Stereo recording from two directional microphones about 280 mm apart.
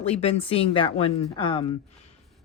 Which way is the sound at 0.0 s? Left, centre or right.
Left.